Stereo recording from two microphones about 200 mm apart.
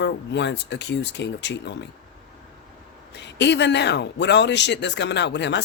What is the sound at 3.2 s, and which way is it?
Speech, 60° left (ahead or behind).